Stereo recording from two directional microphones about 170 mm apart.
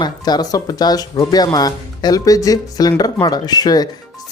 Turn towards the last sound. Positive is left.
turn(degrees=25)  # may be behind; listen again after turning